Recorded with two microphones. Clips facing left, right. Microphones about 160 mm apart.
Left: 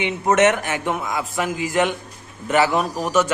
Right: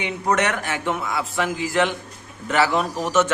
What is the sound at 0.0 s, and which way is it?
A man's voice, 20° left (ahead or behind).